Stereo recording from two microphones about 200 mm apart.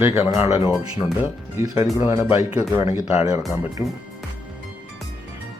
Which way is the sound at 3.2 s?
30° left (ahead or behind).